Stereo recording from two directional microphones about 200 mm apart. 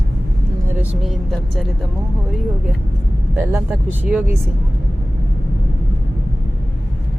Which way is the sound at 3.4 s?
10° right (ahead or behind).